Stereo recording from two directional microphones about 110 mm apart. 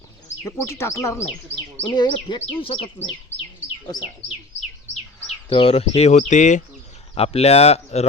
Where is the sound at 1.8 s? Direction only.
45° left (ahead or behind); by 3.1 s 60° left (ahead or behind).